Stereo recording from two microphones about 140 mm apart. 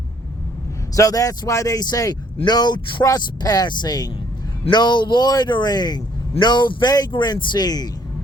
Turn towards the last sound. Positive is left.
turn(degrees=30)  # may be behind; listen again after turning